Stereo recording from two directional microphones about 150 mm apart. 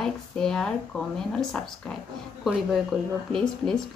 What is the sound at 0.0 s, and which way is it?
Speech, 5° left (ahead or behind).